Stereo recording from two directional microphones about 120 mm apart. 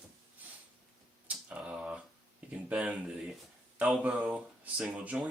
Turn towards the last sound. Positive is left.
turn(degrees=-10)  # may be behind; listen again after turning